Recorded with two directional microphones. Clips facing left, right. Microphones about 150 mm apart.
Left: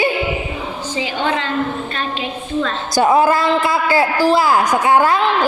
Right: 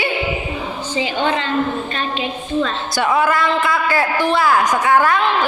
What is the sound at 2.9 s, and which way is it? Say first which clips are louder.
A woman's voice: left 5 dB; 35° left (ahead or behind).